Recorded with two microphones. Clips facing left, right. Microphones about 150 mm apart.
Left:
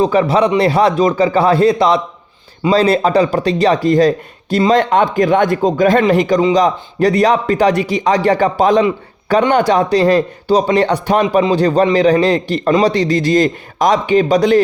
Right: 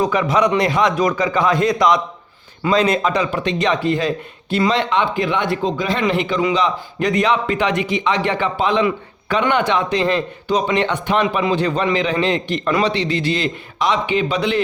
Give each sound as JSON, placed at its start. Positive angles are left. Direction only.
{"t": 0.0, "sound": "a man's voice", "side_deg": 30}